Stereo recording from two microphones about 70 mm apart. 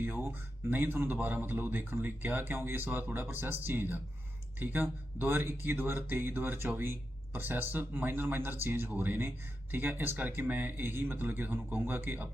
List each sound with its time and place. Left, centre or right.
0.0 s a man's voice: right